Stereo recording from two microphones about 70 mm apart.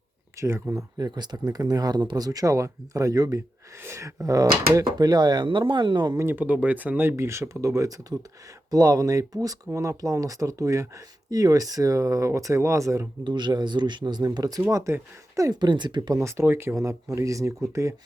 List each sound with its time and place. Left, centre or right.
0.3 s speech: right
0.9 s speech: right
3.8 s speech: right
4.2 s speech: right
6.1 s speech: right
7.2 s speech: right
13.2 s speech: right
14.7 s speech: right
15.6 s speech: right
16.1 s speech: right